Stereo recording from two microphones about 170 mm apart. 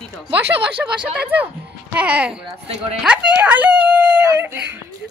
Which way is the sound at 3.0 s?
5° right (ahead or behind).